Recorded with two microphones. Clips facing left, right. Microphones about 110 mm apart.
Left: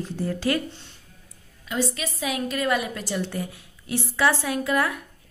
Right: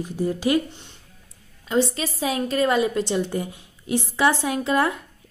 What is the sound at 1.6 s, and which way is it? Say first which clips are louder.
A woman's voice: right 5 dB; 30° right (ahead or behind).